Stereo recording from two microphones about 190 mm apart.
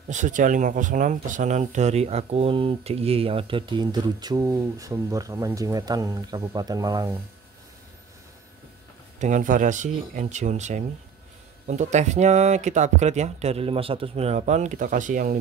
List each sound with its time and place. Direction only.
0.1 s speech: 40° right (ahead or behind); by 7.2 s 20° right (ahead or behind)
9.2 s speech: 45° right (ahead or behind)